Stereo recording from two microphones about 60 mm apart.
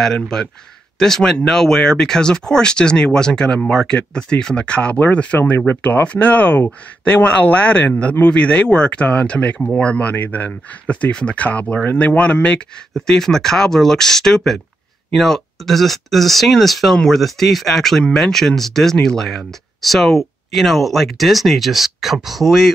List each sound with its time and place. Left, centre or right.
0.0 s speech: centre